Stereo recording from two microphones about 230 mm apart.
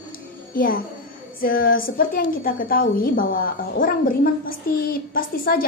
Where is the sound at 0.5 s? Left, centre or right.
Left.